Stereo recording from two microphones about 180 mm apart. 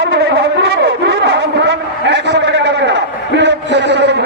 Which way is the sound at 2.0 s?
75° right (ahead or behind).